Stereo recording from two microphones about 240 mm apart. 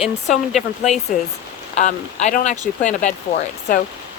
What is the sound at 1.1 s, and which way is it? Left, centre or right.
Speech, left.